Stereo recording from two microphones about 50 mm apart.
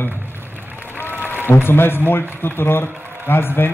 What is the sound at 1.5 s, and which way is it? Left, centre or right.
A man's voice, left.